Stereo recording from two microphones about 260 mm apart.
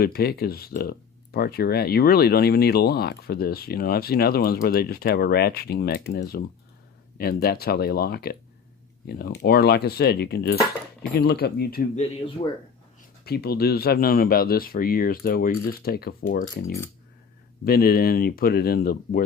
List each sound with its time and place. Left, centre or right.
0.0 s speech: left
13.2 s speech: left